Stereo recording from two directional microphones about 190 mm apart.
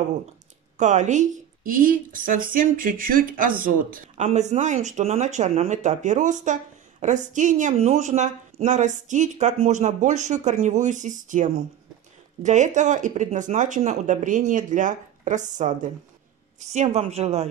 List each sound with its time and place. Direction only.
0.7 s a woman's voice: 40° right (ahead or behind)